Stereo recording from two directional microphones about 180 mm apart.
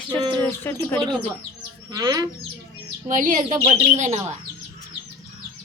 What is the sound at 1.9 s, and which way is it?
Speech, 20° right (ahead or behind).